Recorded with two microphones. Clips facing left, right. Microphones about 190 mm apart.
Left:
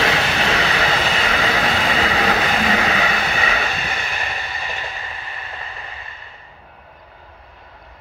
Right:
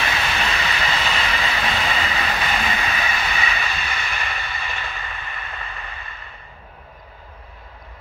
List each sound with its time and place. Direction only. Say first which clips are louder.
0.0 s vehicle: left 5 dB; 65° left (ahead or behind)
3.3 s vehicle: left 4 dB; 55° left (ahead or behind)
3.7 s vehicle: left 2 dB; 40° left (ahead or behind)